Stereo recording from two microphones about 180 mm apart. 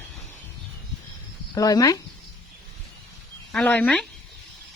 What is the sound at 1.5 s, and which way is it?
Speech, 20° left (ahead or behind).